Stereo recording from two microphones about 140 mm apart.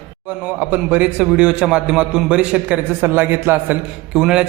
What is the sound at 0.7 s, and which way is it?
A man's voice, 10° right (ahead or behind).